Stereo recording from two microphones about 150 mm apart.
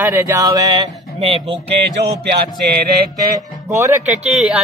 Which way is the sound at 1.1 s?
40° right (ahead or behind).